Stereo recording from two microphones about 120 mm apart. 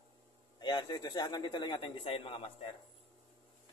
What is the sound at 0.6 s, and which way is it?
A man's voice, 40° left (ahead or behind).